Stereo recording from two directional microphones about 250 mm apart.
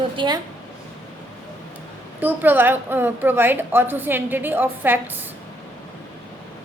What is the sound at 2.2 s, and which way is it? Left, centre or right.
A woman's voice, centre.